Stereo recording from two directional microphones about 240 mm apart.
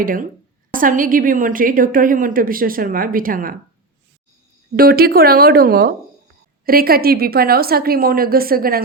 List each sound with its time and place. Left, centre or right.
0.0 s a woman's voice: right
4.8 s a woman's voice: right